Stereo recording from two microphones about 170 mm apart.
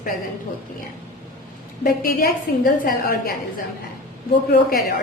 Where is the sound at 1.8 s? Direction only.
60° left (ahead or behind).